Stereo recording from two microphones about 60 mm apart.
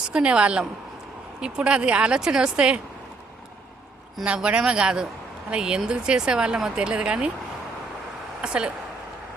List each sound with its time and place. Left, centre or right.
0.1 s speech: centre
4.2 s speech: centre
8.4 s speech: centre